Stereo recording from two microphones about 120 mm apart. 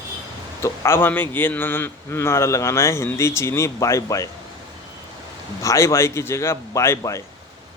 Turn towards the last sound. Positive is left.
turn(degrees=25)  # may be behind; listen again after turning